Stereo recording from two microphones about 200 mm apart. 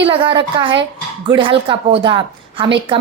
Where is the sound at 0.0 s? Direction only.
25° right (ahead or behind).